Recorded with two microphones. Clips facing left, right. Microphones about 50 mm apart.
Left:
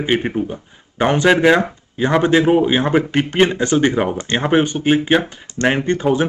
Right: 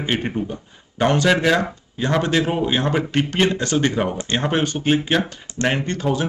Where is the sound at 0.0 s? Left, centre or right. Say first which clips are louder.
Left 5 dB; centre.